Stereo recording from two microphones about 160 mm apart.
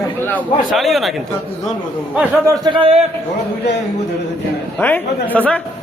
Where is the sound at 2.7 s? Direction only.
35° right (ahead or behind).